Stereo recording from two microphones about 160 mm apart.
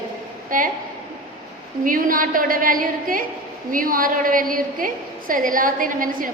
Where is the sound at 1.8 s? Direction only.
60° right (ahead or behind).